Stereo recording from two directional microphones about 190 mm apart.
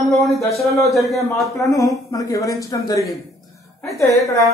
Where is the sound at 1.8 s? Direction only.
15° left (ahead or behind).